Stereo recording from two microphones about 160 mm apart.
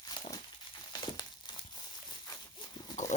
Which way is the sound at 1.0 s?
30° left (ahead or behind).